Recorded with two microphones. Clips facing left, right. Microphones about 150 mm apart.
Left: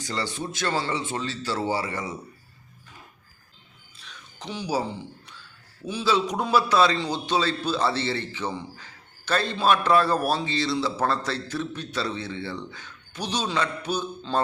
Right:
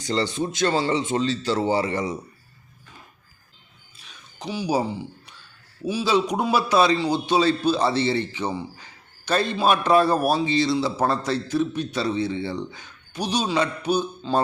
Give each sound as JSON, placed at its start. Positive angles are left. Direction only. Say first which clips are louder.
{"t": 0.0, "sound": "a man's voice", "louder": "right 6 dB", "side_deg": -25}
{"t": 4.4, "sound": "a man's voice", "louder": "right 4 dB", "side_deg": -10}